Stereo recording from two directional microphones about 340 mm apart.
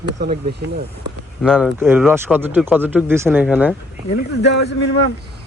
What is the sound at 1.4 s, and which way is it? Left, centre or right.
Speech, centre.